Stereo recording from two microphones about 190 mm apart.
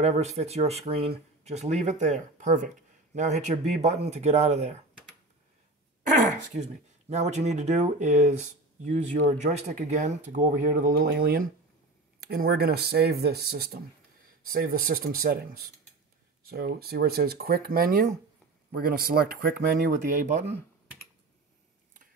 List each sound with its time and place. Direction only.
0.0 s speech: 35° right (ahead or behind)
6.5 s speech: 35° right (ahead or behind)